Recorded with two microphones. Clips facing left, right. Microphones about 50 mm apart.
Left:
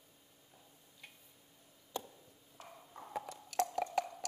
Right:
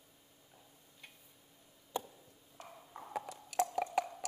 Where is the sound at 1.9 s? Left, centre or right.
Centre.